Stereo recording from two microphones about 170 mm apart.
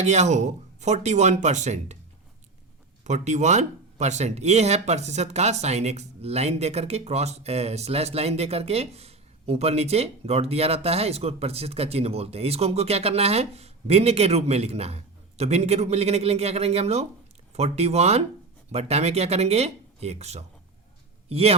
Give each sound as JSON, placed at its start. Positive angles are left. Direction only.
{"t": 0.0, "sound": "speech", "side_deg": -40}
{"t": 3.0, "sound": "a man's voice", "side_deg": -45}